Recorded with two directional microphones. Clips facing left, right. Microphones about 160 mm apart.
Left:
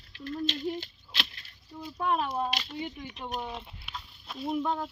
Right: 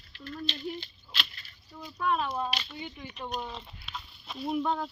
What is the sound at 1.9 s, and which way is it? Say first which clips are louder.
Speech: left 1 dB; 20° left (ahead or behind).